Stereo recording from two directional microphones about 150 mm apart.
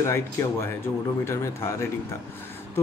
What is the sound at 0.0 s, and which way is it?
Speech, 20° left (ahead or behind).